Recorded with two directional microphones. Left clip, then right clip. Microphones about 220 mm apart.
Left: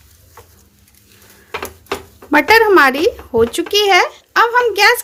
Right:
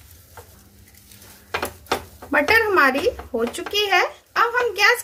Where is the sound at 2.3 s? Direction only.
45° left (ahead or behind).